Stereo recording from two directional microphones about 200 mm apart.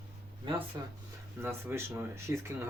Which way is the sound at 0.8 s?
20° right (ahead or behind).